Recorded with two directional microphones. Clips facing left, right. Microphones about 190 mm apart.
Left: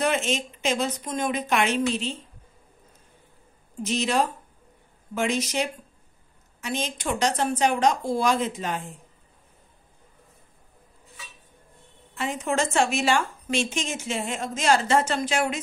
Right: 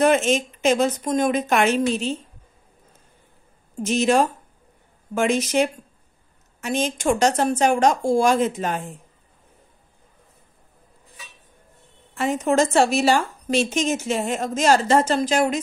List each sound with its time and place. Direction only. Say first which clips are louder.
0.0 s a woman's voice: right 7 dB; 50° right (ahead or behind)
3.8 s a woman's voice: right 6 dB; 50° right (ahead or behind)
12.2 s a woman's voice: right 7 dB; 40° right (ahead or behind)